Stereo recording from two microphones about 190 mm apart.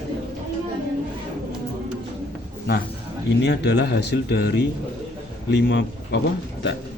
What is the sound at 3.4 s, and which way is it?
A man's voice, 65° left (ahead or behind).